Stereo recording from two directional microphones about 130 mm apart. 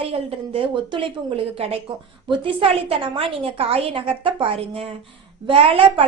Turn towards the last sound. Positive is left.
turn(degrees=-45)  # may be behind; listen again after turning